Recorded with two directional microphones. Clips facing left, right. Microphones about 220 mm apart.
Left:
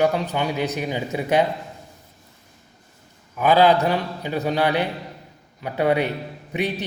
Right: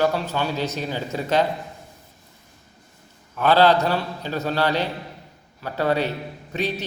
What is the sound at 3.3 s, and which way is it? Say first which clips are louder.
A man's voice: left 1 dB; 10° left (ahead or behind).